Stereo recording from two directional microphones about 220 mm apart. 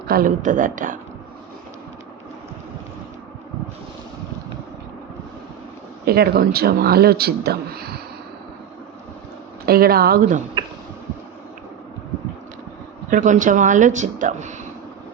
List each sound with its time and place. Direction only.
0.1 s speech: 40° right (ahead or behind)
6.1 s a man's voice: 45° right (ahead or behind)
9.6 s a man's voice: 45° right (ahead or behind)
13.1 s speech: 35° right (ahead or behind)